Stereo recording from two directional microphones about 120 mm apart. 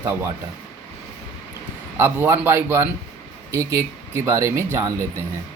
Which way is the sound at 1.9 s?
20° right (ahead or behind).